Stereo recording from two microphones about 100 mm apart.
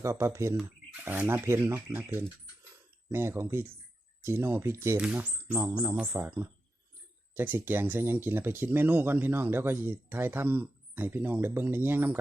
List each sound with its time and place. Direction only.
0.0 s speech: 30° right (ahead or behind)
4.9 s speech: 15° right (ahead or behind)